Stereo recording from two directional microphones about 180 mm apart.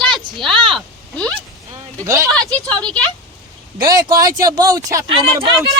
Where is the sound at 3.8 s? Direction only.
20° right (ahead or behind).